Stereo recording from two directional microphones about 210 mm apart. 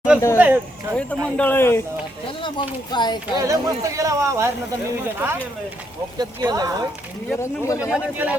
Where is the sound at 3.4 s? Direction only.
15° right (ahead or behind).